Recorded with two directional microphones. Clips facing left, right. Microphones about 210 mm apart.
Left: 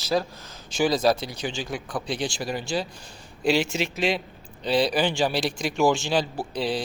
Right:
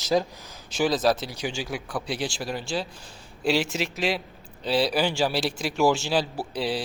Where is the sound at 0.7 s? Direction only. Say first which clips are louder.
Left 1 dB; centre (ahead or behind).